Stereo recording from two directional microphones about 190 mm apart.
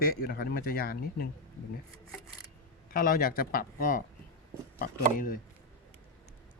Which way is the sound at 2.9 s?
50° left (ahead or behind).